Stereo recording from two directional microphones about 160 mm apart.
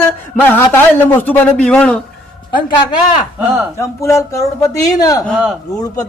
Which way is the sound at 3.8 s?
20° left (ahead or behind).